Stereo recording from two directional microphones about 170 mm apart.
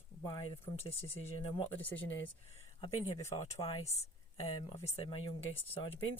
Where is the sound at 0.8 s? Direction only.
35° left (ahead or behind).